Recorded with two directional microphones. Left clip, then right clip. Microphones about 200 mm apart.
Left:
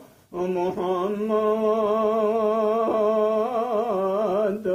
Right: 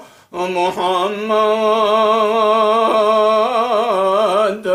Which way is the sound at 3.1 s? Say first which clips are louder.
Right 9 dB; 15° right (ahead or behind).